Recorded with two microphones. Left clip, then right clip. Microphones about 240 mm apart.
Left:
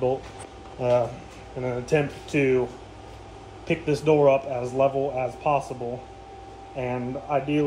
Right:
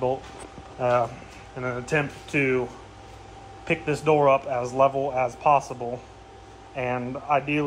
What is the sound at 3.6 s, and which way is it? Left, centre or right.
Speech, centre.